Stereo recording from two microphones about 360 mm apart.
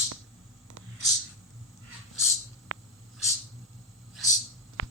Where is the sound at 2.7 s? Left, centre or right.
Right.